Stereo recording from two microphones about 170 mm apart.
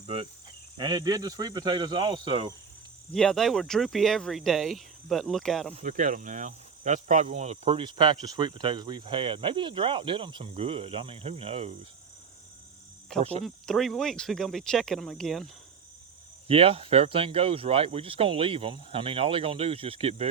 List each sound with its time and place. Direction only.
0.0 s insect: 35° right (ahead or behind)
0.8 s speech: 25° right (ahead or behind)
3.1 s speech: 5° left (ahead or behind)
5.8 s speech: 50° right (ahead or behind); by 11.9 s 35° right (ahead or behind)
13.1 s speech: 40° right (ahead or behind)
13.4 s speech: centre (ahead or behind)
16.5 s speech: 35° right (ahead or behind)